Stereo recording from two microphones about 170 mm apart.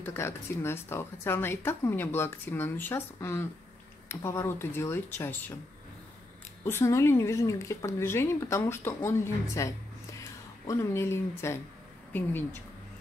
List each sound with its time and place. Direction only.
0.0 s speech: 15° left (ahead or behind)
6.6 s speech: 15° left (ahead or behind)